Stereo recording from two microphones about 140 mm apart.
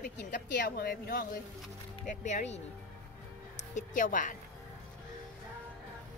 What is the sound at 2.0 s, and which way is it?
Speech, 60° left (ahead or behind).